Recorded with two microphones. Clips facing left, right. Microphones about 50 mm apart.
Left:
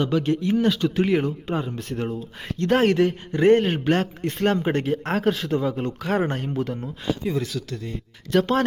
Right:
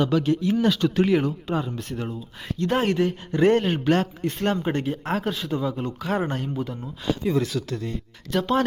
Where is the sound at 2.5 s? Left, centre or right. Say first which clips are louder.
Left 3 dB; left.